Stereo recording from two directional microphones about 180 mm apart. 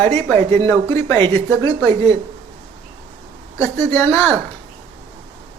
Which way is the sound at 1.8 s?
35° right (ahead or behind).